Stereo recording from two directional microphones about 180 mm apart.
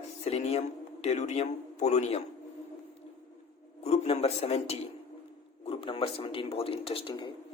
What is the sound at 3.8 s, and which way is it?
Speech, 35° left (ahead or behind).